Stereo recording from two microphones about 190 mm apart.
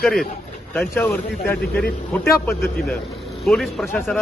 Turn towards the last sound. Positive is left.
turn(degrees=5)  # may be behind; listen again after turning